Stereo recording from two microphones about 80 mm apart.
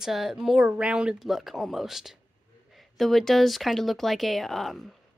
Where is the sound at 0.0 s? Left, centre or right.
Centre.